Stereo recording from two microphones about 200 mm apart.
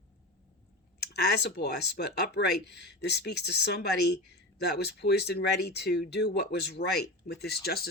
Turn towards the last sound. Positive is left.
turn(degrees=50)  # may be behind; listen again after turning